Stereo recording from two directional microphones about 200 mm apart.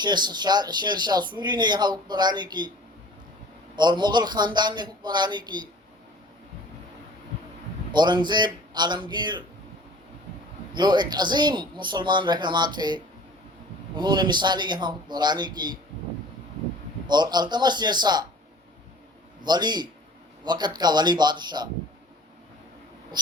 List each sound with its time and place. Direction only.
0.0 s speech: 20° right (ahead or behind)
3.8 s speech: 20° right (ahead or behind)
7.9 s speech: 20° right (ahead or behind)
10.8 s speech: 20° right (ahead or behind)
17.1 s speech: 20° right (ahead or behind)
19.4 s speech: 20° right (ahead or behind)